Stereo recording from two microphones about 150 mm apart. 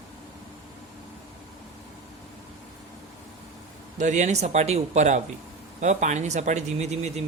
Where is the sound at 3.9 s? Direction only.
55° right (ahead or behind).